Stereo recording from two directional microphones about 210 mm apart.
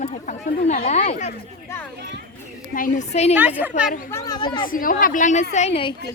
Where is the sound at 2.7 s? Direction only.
40° left (ahead or behind).